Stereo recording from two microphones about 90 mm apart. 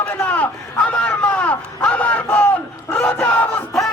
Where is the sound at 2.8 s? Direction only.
20° left (ahead or behind).